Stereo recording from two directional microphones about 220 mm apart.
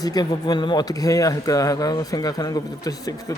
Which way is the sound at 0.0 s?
15° left (ahead or behind).